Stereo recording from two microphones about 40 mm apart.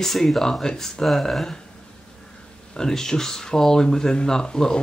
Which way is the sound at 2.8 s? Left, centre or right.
Centre.